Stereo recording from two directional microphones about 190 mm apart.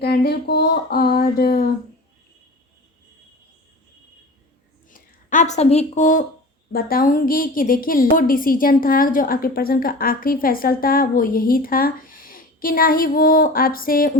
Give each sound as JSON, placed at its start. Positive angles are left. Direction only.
{"t": 0.0, "sound": "a sound", "side_deg": 55}
{"t": 1.1, "sound": "a woman's voice", "side_deg": 50}
{"t": 4.9, "sound": "a woman's voice", "side_deg": 45}